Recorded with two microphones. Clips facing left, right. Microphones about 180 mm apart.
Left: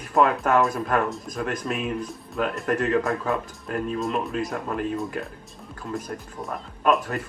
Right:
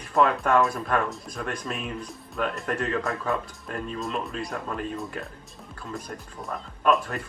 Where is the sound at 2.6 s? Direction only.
45° left (ahead or behind).